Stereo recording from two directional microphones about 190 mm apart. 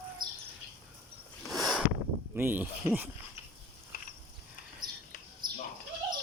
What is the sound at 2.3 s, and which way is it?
Speech, 10° right (ahead or behind).